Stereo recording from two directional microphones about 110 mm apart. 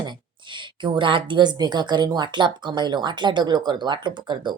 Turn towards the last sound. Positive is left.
turn(degrees=-45)  # may be behind; listen again after turning